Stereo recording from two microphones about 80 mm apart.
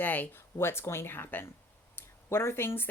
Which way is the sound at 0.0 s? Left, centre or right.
Left.